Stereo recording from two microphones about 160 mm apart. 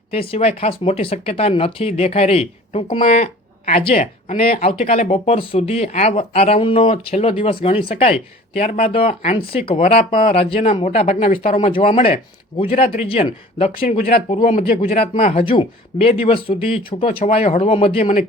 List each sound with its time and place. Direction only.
0.1 s speech: 35° left (ahead or behind)
14.7 s speech: 55° left (ahead or behind)
14.9 s speech: 40° left (ahead or behind)